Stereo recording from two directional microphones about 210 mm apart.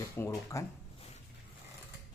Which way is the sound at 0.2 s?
15° left (ahead or behind).